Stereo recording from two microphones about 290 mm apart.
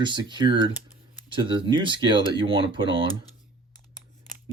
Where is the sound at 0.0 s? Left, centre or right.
Centre.